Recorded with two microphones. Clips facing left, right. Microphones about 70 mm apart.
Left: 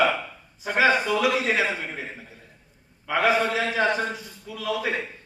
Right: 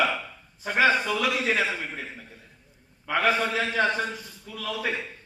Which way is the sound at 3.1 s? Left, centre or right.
Centre.